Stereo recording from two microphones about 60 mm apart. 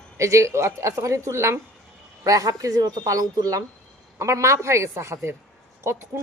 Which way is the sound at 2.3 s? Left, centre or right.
Right.